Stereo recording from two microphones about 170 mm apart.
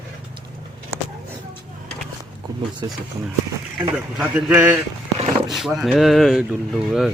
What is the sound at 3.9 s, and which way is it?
A man's voice, 5° right (ahead or behind).